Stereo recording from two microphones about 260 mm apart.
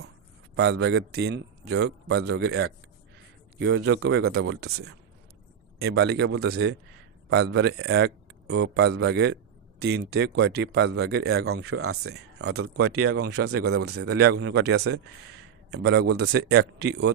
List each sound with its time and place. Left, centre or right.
0.5 s speech: right
5.8 s speech: right
11.6 s speech: right
14.3 s speech: right
15.9 s speech: right